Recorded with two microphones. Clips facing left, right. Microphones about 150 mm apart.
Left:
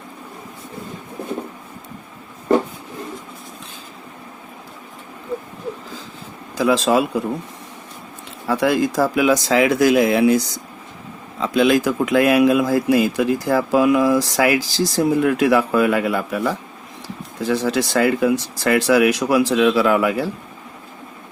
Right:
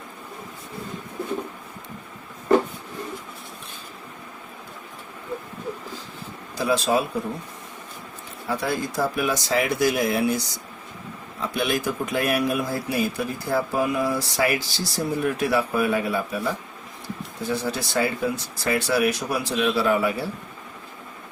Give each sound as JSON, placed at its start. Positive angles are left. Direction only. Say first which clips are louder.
{"t": 6.6, "sound": "speech", "louder": "left 5 dB", "side_deg": 90}
{"t": 8.4, "sound": "speech", "louder": "left 8 dB", "side_deg": 90}
{"t": 11.3, "sound": "speech", "louder": "left 9 dB", "side_deg": 90}